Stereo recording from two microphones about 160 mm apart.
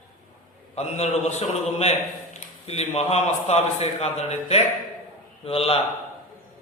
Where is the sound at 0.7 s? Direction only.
40° left (ahead or behind).